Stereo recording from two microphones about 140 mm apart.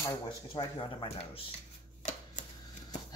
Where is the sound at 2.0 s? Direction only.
60° left (ahead or behind).